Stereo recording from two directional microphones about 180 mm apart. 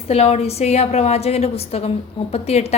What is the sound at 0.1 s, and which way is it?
A woman's voice, 35° left (ahead or behind).